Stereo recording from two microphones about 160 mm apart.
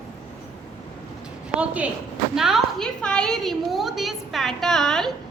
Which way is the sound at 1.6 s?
10° right (ahead or behind).